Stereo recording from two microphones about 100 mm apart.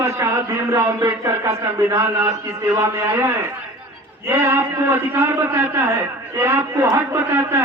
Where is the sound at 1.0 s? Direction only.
30° right (ahead or behind).